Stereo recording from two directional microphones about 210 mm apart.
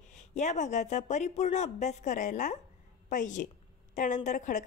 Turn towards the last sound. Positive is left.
turn(degrees=35)  # may be behind; listen again after turning